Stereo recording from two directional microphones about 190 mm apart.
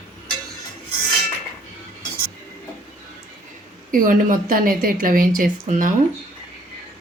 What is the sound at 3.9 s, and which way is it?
A woman's voice, 45° right (ahead or behind).